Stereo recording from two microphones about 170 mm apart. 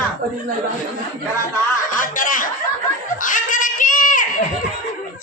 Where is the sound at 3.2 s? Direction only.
50° left (ahead or behind).